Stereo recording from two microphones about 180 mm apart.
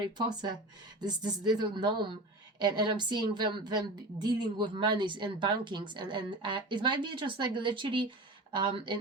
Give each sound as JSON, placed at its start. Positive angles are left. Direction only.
{"t": 0.2, "sound": "a woman's voice", "side_deg": -25}